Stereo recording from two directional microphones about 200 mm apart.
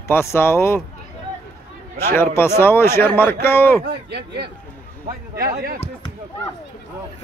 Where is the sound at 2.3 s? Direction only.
10° left (ahead or behind).